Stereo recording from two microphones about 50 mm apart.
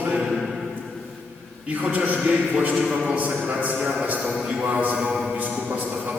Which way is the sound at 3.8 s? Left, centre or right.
Right.